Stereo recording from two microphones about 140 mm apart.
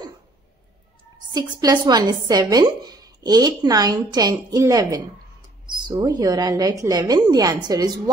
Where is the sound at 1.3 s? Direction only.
30° right (ahead or behind).